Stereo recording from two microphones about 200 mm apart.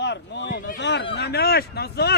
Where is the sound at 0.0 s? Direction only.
60° left (ahead or behind).